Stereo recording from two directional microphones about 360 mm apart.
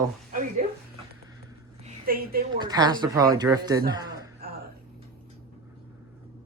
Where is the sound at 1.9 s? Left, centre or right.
Right.